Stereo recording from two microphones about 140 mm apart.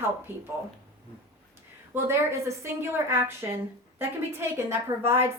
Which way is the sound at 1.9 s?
20° right (ahead or behind).